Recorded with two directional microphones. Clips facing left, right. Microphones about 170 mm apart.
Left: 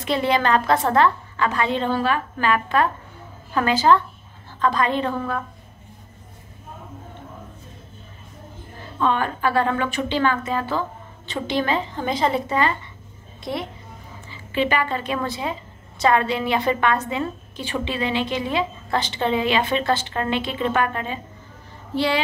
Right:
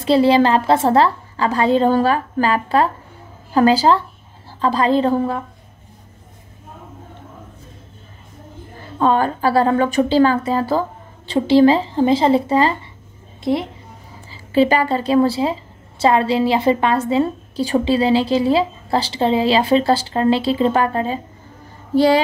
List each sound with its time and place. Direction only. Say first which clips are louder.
0.0 s a woman's voice: right 8 dB; 30° right (ahead or behind)
9.0 s a woman's voice: right 5 dB; 35° right (ahead or behind)
14.3 s a woman's voice: right 7 dB; 35° right (ahead or behind)